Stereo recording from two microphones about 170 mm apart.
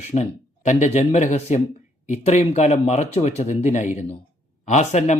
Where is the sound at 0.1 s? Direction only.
45° left (ahead or behind).